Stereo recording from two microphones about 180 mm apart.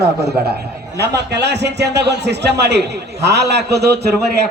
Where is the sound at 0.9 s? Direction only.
65° right (ahead or behind).